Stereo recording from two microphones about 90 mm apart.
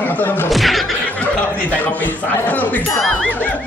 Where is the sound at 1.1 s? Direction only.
15° left (ahead or behind).